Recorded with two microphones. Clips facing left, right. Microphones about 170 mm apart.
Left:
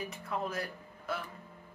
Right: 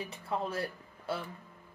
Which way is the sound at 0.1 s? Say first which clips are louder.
Right 1 dB; 30° right (ahead or behind).